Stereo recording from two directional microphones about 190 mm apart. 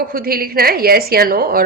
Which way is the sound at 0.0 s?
50° right (ahead or behind).